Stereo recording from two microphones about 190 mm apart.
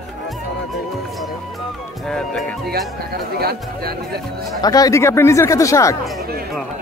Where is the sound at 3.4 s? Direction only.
55° right (ahead or behind).